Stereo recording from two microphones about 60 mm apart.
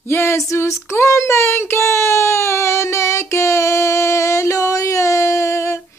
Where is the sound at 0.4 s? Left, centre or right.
Left.